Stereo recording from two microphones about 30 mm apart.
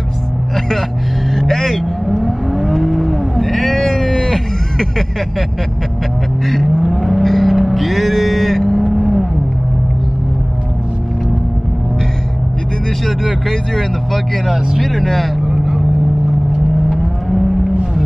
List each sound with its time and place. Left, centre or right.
1.3 s speech: centre
1.7 s vehicle: centre
3.9 s vehicle: left
6.4 s speech: centre
6.8 s vehicle: centre
13.5 s speech: centre
17.0 s vehicle: centre